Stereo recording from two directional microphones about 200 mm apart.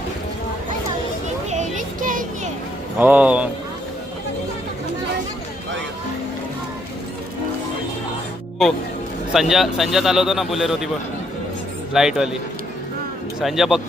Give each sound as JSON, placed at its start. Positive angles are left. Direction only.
{"t": 1.5, "sound": "a sound", "side_deg": -35}
{"t": 3.0, "sound": "a man's voice", "side_deg": -5}
{"t": 9.3, "sound": "speech", "side_deg": 0}
{"t": 11.9, "sound": "speech", "side_deg": 0}
{"t": 13.4, "sound": "speech", "side_deg": 0}